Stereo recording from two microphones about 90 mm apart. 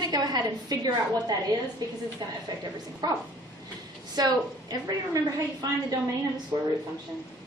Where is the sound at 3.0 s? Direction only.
50° right (ahead or behind).